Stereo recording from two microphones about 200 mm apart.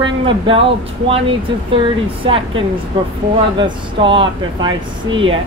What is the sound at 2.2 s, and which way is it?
Speech, 25° right (ahead or behind).